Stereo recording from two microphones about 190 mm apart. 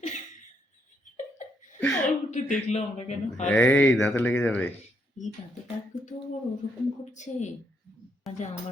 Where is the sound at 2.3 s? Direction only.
35° left (ahead or behind).